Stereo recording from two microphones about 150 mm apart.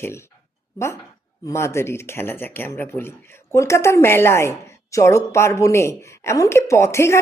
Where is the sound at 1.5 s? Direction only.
20° left (ahead or behind).